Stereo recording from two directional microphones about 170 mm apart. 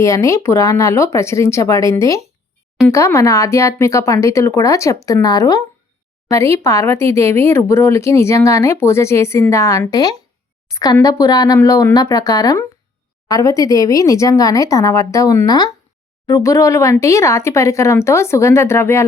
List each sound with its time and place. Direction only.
0.0 s speech: 15° left (ahead or behind)